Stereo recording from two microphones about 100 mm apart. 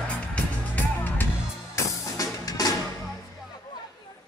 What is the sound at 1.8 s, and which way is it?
Music, 35° left (ahead or behind).